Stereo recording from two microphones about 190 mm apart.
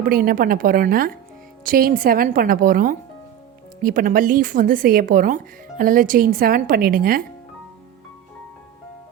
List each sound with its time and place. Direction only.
0.0 s speech: 50° right (ahead or behind)